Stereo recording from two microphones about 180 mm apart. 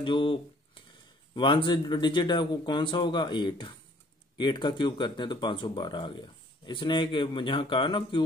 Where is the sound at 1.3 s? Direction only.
25° left (ahead or behind).